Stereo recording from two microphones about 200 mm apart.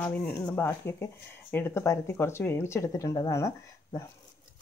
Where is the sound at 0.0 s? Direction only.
5° left (ahead or behind).